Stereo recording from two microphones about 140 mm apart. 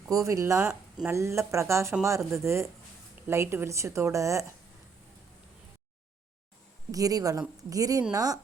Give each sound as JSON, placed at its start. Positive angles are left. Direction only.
{"t": 0.1, "sound": "speech", "side_deg": -20}
{"t": 6.9, "sound": "speech", "side_deg": -25}